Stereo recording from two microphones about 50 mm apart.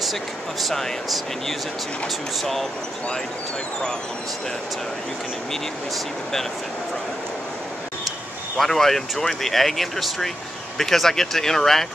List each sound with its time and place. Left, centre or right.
0.0 s speech: centre
8.5 s speech: centre